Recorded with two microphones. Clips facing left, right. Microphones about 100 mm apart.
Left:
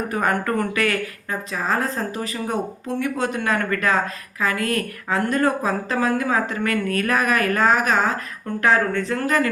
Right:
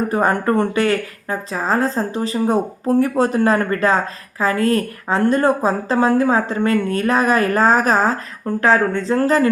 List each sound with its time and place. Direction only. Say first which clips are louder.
0.1 s speech: right 3 dB; 30° right (ahead or behind)